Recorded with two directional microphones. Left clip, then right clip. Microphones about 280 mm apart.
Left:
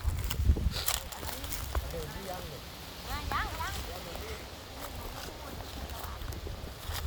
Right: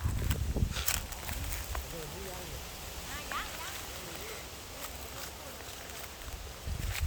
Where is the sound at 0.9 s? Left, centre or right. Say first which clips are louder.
Left 1 dB; left.